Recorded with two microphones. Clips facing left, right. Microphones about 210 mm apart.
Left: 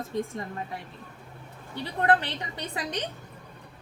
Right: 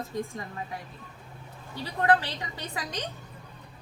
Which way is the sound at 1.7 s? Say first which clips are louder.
Even; 25° left (ahead or behind).